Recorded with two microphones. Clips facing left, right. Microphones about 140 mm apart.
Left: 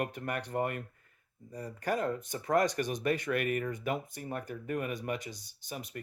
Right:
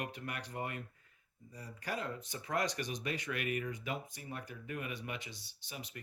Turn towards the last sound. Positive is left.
turn(degrees=50)  # may be behind; listen again after turning